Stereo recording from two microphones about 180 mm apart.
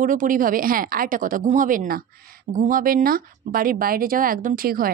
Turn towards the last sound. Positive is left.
turn(degrees=-55)  # may be behind; listen again after turning